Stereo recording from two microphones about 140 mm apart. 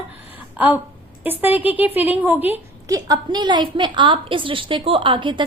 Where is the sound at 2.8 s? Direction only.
25° right (ahead or behind).